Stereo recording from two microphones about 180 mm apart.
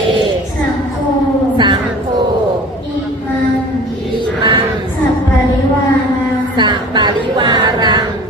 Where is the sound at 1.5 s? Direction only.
25° right (ahead or behind).